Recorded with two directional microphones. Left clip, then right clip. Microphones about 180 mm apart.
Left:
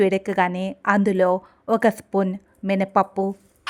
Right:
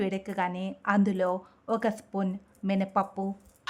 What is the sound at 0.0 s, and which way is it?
A woman's voice, 30° left (ahead or behind).